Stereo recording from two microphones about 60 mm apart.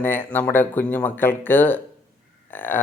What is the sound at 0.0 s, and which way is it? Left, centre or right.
Speech, left.